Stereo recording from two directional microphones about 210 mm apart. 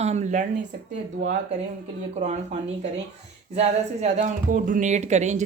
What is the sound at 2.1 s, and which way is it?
Speech, 35° right (ahead or behind).